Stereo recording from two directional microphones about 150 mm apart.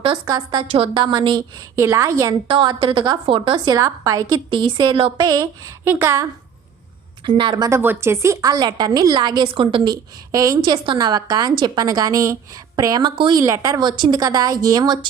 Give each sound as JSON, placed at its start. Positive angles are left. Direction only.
{"t": 0.0, "sound": "a woman's voice", "side_deg": -30}
{"t": 1.7, "sound": "a woman's voice", "side_deg": -20}
{"t": 2.5, "sound": "a woman's voice", "side_deg": -30}
{"t": 3.8, "sound": "a woman's voice", "side_deg": -25}
{"t": 5.8, "sound": "a woman's voice", "side_deg": -15}
{"t": 7.3, "sound": "a woman's voice", "side_deg": -30}
{"t": 7.8, "sound": "a woman's voice", "side_deg": -15}
{"t": 13.4, "sound": "a woman's voice", "side_deg": -20}